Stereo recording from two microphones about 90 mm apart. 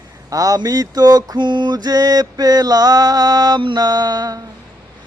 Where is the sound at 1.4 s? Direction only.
60° right (ahead or behind); by 4.4 s 45° right (ahead or behind).